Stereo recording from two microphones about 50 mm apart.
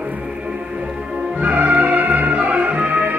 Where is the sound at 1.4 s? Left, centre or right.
Right.